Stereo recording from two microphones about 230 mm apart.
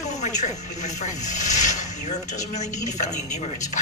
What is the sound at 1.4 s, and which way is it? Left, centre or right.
Snake, left.